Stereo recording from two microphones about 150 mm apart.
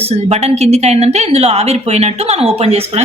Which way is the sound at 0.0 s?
45° right (ahead or behind).